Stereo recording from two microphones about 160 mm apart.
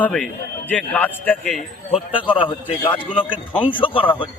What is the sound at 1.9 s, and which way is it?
Speech, 35° left (ahead or behind).